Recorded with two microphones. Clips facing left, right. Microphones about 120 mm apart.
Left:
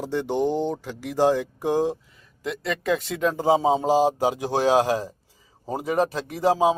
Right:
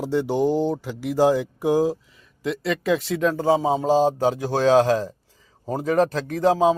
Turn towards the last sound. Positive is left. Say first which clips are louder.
# right 2 dB
turn(degrees=10)  # may be behind; listen again after turning